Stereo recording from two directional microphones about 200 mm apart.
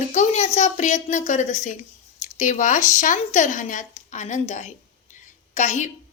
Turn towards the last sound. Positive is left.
turn(degrees=35)  # may be behind; listen again after turning